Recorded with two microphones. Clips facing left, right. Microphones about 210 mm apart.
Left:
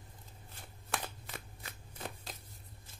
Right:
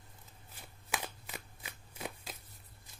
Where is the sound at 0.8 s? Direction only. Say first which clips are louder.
Even; 10° right (ahead or behind).